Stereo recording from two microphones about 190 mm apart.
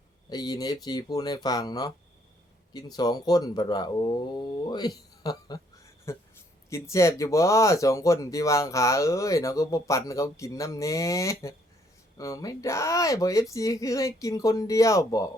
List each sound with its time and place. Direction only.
0.3 s speech: 20° left (ahead or behind)